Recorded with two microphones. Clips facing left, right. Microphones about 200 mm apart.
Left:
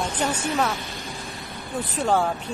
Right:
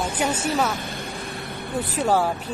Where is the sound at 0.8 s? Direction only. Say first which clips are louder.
Right 3 dB; 55° right (ahead or behind).